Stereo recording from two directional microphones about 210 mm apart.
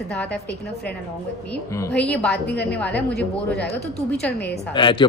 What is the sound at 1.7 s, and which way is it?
Speech, 5° left (ahead or behind).